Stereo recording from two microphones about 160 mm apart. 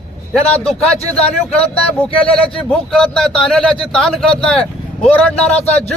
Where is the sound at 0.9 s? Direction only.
40° left (ahead or behind).